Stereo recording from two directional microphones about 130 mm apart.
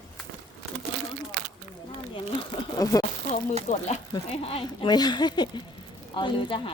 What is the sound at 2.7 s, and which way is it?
Speech, 25° left (ahead or behind).